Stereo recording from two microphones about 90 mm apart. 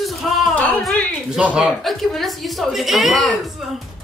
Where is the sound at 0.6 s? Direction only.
15° left (ahead or behind).